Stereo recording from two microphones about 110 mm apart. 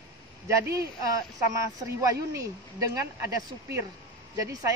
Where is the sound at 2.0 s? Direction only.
30° right (ahead or behind).